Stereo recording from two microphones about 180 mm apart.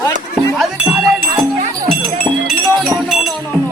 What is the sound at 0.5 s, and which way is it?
Music, 5° right (ahead or behind).